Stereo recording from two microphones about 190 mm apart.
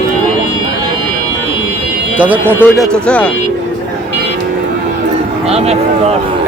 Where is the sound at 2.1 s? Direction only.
10° right (ahead or behind).